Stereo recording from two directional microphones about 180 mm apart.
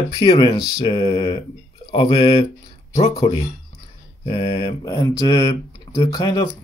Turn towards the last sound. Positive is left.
turn(degrees=20)  # may be behind; listen again after turning